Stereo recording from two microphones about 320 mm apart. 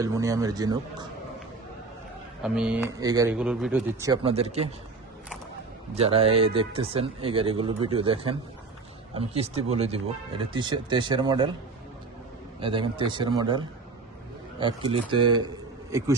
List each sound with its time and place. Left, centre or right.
0.0 s speech: centre
2.4 s speech: centre
5.9 s speech: centre
12.5 s a man's voice: centre